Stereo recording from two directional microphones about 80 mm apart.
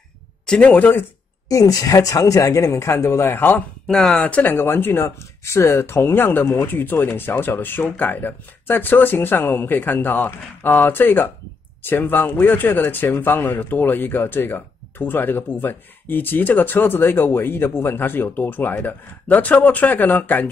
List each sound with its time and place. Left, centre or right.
0.5 s speech: centre
1.5 s speech: left